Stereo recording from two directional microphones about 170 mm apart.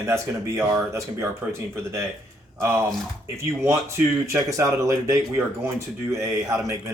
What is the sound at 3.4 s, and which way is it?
Speech, 15° right (ahead or behind).